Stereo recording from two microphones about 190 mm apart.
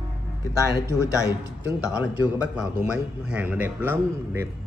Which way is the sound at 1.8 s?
5° right (ahead or behind).